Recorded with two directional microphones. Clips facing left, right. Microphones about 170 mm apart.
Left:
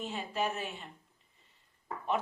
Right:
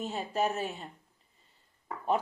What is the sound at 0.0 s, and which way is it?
Speech, 40° right (ahead or behind).